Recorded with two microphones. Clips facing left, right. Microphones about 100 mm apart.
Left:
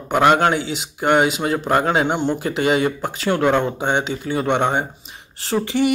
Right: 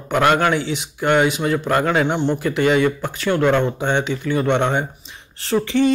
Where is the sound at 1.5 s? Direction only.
25° left (ahead or behind).